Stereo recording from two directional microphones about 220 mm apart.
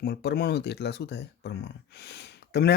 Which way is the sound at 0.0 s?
45° left (ahead or behind).